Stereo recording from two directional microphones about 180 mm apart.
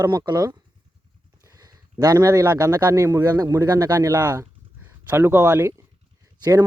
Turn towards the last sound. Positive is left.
turn(degrees=-20)  # may be behind; listen again after turning